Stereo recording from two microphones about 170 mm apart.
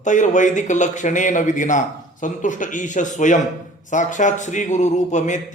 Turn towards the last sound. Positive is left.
turn(degrees=45)  # may be behind; listen again after turning